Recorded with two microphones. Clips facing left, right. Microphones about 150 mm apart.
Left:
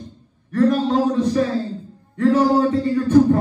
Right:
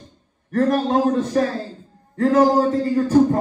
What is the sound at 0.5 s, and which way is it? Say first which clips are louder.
Speech: left 2 dB; 50° right (ahead or behind).